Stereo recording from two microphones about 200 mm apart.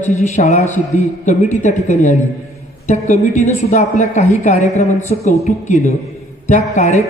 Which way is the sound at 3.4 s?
35° left (ahead or behind).